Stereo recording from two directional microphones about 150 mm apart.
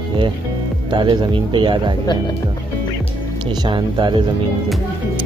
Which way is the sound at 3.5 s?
30° right (ahead or behind).